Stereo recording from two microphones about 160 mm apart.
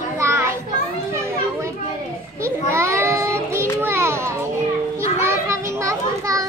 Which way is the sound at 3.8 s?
15° right (ahead or behind).